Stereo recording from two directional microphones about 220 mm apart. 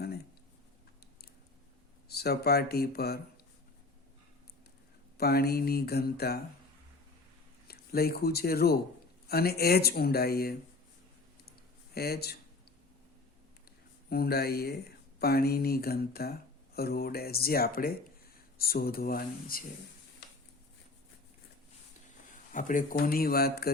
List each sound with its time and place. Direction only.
2.0 s speech: 45° left (ahead or behind)
5.1 s speech: 45° left (ahead or behind)
7.7 s speech: 45° left (ahead or behind)
11.9 s speech: 45° left (ahead or behind)
14.1 s speech: 45° left (ahead or behind)
22.5 s speech: 35° left (ahead or behind)